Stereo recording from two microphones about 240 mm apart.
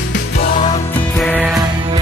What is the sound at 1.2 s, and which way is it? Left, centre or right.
Music, centre.